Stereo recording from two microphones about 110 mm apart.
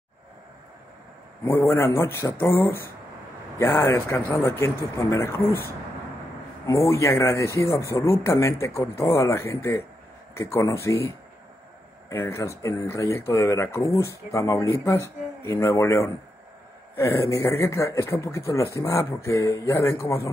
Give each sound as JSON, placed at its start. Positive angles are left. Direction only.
{"t": 1.4, "sound": "speech", "side_deg": 20}
{"t": 6.6, "sound": "speech", "side_deg": 25}